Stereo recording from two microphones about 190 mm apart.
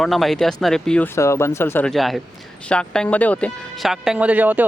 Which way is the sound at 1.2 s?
15° left (ahead or behind).